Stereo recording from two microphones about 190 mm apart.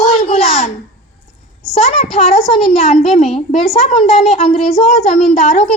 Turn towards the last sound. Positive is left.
turn(degrees=35)  # may be behind; listen again after turning